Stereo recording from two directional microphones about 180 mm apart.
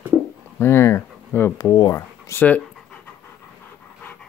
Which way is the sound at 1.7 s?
25° left (ahead or behind).